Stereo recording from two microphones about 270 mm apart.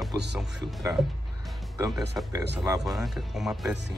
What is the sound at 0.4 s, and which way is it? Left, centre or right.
Speech, centre.